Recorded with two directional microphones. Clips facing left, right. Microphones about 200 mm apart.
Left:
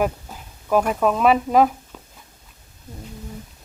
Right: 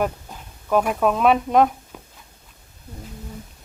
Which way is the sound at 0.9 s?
Centre (ahead or behind).